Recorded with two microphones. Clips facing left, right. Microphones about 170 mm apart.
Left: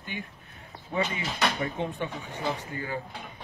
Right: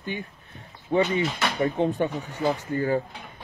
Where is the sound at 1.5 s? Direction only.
35° right (ahead or behind).